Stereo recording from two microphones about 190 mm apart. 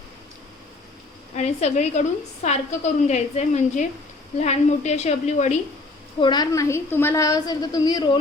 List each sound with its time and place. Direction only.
1.4 s a woman's voice: 35° left (ahead or behind)
6.1 s a woman's voice: 25° left (ahead or behind)